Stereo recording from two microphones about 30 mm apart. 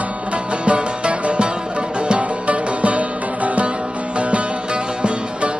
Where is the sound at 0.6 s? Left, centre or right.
Right.